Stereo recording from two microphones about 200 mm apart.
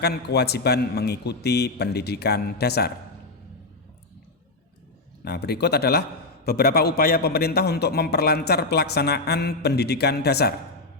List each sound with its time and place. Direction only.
0.0 s a man's voice: 55° left (ahead or behind)
5.2 s a man's voice: 55° left (ahead or behind)